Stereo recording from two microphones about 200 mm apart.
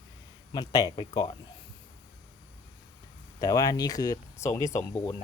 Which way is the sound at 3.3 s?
20° left (ahead or behind).